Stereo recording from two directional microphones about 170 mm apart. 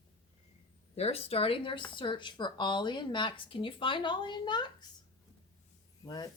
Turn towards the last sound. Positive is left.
turn(degrees=25)  # may be behind; listen again after turning